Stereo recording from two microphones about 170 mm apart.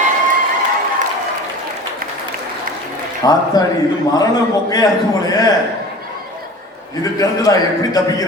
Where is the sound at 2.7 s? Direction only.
55° right (ahead or behind).